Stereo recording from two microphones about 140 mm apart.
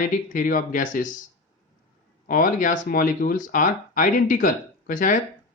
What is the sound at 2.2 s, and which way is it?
Speech, 80° left.